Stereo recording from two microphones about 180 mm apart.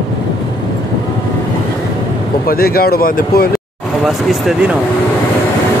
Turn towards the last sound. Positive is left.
turn(degrees=0)  # may be behind; listen again after turning